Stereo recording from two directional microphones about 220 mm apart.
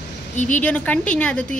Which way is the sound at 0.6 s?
5° left (ahead or behind).